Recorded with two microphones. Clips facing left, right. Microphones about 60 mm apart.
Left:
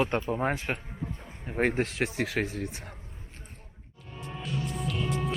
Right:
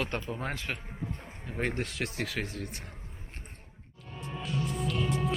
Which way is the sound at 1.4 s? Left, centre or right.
Left.